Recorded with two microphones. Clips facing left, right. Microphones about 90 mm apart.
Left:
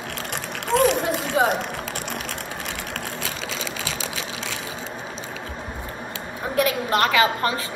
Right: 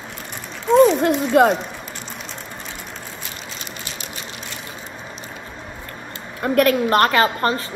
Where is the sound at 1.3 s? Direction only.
65° right (ahead or behind).